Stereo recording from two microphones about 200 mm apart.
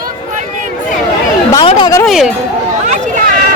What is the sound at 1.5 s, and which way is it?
Speech, 25° left (ahead or behind).